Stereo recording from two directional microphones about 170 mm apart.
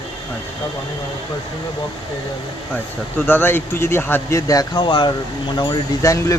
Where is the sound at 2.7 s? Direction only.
10° left (ahead or behind).